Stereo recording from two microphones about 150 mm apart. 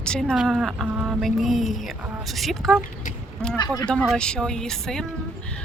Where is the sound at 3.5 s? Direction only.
25° left (ahead or behind).